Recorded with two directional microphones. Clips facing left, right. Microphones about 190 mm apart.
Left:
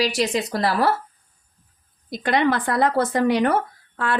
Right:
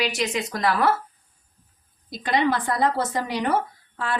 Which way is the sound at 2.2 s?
60° left (ahead or behind).